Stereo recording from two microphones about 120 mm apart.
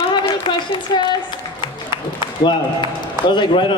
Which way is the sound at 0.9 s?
40° left (ahead or behind).